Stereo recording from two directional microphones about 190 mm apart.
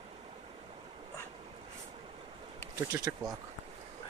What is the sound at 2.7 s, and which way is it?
Speech, 20° right (ahead or behind).